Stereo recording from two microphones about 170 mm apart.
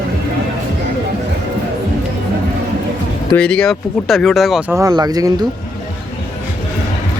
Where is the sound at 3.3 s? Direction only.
5° left (ahead or behind).